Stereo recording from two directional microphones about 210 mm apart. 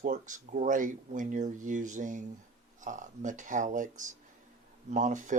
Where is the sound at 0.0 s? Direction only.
40° right (ahead or behind).